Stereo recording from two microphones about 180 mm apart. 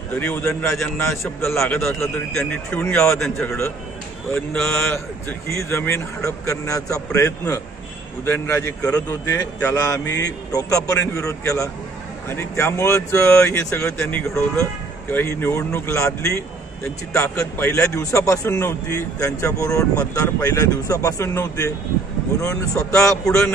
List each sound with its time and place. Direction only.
0.1 s a man's voice: 10° left (ahead or behind)
1.6 s a man's voice: centre (ahead or behind)